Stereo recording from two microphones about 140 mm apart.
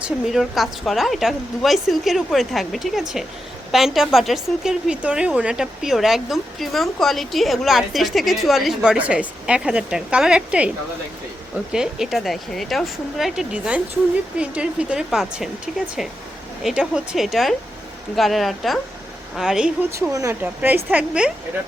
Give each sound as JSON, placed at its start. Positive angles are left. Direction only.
{"t": 0.0, "sound": "a woman's voice", "side_deg": -5}
{"t": 19.9, "sound": "speech", "side_deg": -20}